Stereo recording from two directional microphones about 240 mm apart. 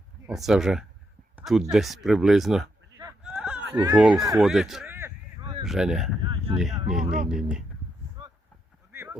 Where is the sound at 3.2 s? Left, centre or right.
Centre.